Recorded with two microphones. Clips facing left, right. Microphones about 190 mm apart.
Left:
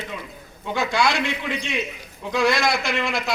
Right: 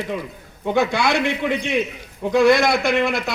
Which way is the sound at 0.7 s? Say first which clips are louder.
Right 3 dB; 60° right (ahead or behind).